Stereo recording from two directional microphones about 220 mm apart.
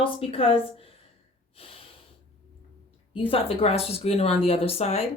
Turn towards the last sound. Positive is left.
turn(degrees=30)  # may be behind; listen again after turning